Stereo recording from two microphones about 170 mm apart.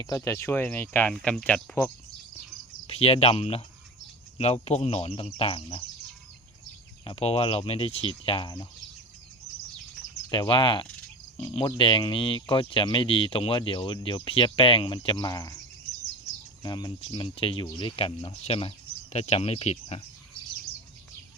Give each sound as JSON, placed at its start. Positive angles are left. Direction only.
{"t": 0.0, "sound": "speech", "side_deg": 20}
{"t": 2.8, "sound": "speech", "side_deg": 35}
{"t": 7.0, "sound": "speech", "side_deg": 35}
{"t": 10.3, "sound": "speech", "side_deg": 30}
{"t": 16.6, "sound": "speech", "side_deg": 25}